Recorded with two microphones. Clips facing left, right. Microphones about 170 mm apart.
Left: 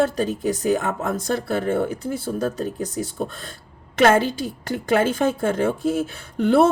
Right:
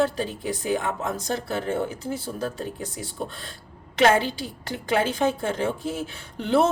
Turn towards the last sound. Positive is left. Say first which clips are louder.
# left 5 dB
turn(degrees=50)  # may be behind; listen again after turning